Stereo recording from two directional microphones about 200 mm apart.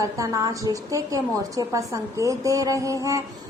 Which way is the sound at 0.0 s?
15° right (ahead or behind).